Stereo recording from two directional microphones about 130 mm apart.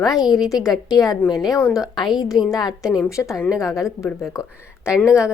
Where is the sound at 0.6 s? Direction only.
30° left (ahead or behind).